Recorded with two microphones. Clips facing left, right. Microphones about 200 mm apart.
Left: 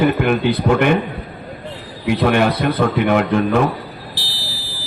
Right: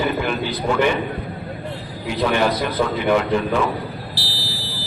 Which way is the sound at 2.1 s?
60° left (ahead or behind).